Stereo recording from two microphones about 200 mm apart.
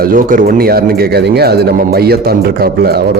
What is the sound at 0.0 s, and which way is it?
Speech, 45° right (ahead or behind).